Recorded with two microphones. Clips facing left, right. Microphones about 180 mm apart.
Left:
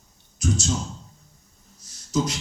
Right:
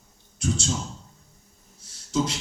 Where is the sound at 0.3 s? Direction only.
30° right (ahead or behind).